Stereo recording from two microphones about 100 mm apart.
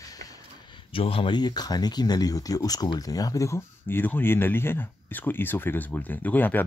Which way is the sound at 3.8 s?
20° left (ahead or behind).